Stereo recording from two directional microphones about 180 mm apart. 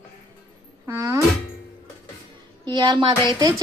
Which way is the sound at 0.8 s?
15° right (ahead or behind).